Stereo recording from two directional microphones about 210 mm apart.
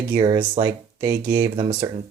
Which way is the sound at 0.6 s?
10° right (ahead or behind).